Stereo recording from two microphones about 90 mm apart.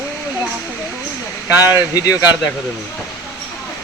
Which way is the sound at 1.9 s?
40° left (ahead or behind).